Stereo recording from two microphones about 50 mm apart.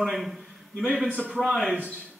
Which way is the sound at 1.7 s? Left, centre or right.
Right.